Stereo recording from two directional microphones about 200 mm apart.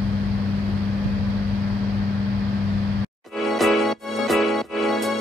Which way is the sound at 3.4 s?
Centre (ahead or behind).